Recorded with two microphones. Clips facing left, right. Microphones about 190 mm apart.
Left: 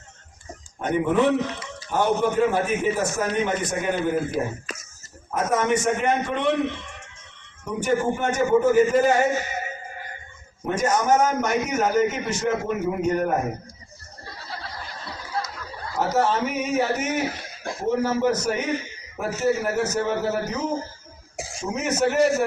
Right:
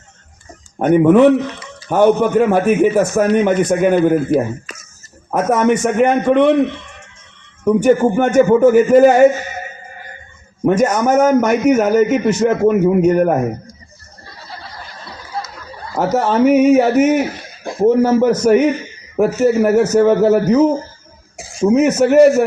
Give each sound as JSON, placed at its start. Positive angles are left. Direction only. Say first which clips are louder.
{"t": 0.8, "sound": "a man's voice", "louder": "right 12 dB", "side_deg": -65}
{"t": 7.6, "sound": "a man's voice", "louder": "right 11 dB", "side_deg": -65}
{"t": 10.7, "sound": "a man's voice", "louder": "right 7 dB", "side_deg": -65}
{"t": 16.0, "sound": "a man's voice", "louder": "right 8 dB", "side_deg": -65}